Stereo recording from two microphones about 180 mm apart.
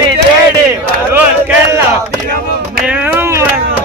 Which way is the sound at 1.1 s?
10° right (ahead or behind).